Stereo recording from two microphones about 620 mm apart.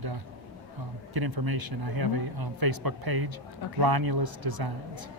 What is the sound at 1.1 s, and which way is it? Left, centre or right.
Speech, right.